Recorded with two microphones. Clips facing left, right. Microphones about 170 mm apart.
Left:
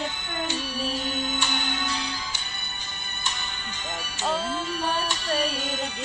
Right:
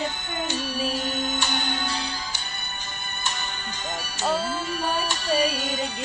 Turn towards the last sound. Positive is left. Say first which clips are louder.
# right 2 dB
turn(degrees=-40)  # may be behind; listen again after turning